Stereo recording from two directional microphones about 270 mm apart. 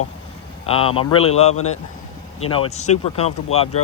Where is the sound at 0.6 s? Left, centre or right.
Left.